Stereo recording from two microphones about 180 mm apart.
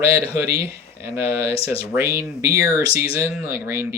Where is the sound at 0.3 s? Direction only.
15° right (ahead or behind).